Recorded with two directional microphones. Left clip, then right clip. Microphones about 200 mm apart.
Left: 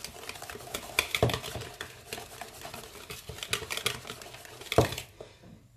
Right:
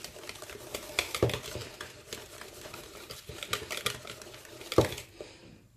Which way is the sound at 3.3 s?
Centre (ahead or behind).